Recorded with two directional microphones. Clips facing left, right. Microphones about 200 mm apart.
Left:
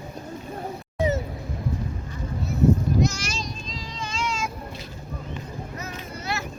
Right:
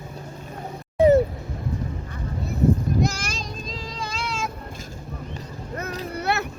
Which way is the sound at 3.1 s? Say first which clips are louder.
Even; 55° right (ahead or behind).